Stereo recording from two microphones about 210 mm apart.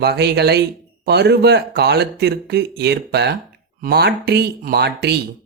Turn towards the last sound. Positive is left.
turn(degrees=-55)  # may be behind; listen again after turning